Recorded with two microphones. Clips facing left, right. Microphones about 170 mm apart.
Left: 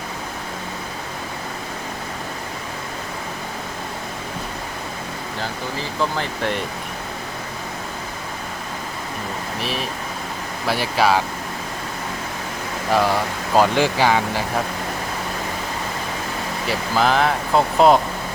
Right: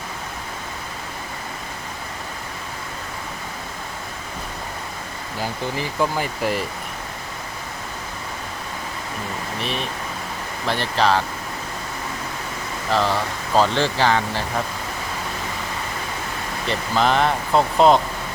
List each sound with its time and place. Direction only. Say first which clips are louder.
5.4 s speech: right 3 dB; 15° right (ahead or behind)
9.6 s speech: even; centre (ahead or behind)
12.9 s speech: left 2 dB; 10° left (ahead or behind)
16.6 s speech: even; 5° left (ahead or behind)